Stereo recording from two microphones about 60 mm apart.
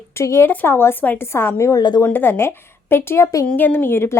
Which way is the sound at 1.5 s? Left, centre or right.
Left.